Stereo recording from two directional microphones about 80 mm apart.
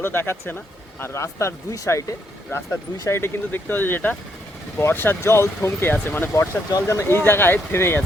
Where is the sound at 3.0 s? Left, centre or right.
Left.